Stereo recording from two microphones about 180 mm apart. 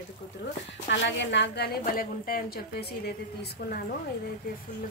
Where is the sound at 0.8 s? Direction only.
85° left; by 3.2 s 60° left (ahead or behind).